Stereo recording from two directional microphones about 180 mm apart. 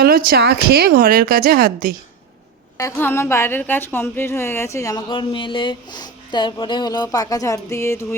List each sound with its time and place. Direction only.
0.0 s speech: 55° right (ahead or behind)
2.7 s a woman's voice: 15° left (ahead or behind)